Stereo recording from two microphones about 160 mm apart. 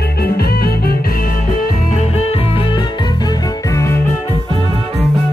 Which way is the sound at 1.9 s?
45° left (ahead or behind).